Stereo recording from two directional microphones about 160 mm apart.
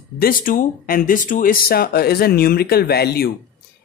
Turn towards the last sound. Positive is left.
turn(degrees=80)